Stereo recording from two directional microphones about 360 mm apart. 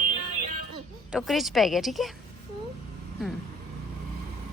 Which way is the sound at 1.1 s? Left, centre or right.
Centre.